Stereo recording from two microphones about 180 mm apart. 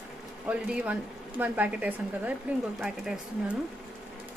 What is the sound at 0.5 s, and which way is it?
Speech, 5° right (ahead or behind).